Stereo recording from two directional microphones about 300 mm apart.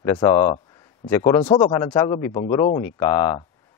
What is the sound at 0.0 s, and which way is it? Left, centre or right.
Speech, centre.